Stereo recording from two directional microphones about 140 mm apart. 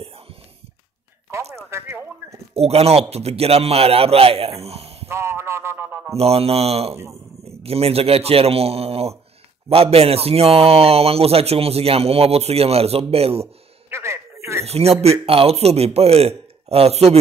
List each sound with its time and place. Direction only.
1.7 s speech: 20° right (ahead or behind)
2.5 s a man's voice: 45° right (ahead or behind)
5.0 s a sound: 20° right (ahead or behind)
6.1 s a man's voice: 45° right (ahead or behind)
13.8 s a sound: 20° right (ahead or behind)
14.6 s a man's voice: 45° right (ahead or behind)